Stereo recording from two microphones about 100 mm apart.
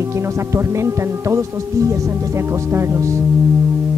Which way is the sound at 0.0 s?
30° right (ahead or behind).